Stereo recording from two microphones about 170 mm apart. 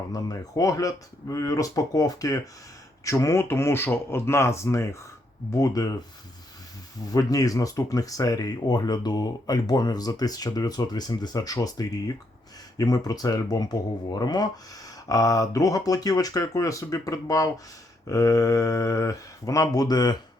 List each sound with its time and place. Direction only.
0.1 s speech: 20° left (ahead or behind)
7.1 s speech: 20° left (ahead or behind)